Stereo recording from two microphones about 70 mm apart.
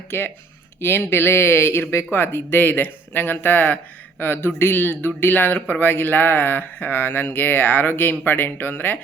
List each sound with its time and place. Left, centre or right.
0.1 s speech: left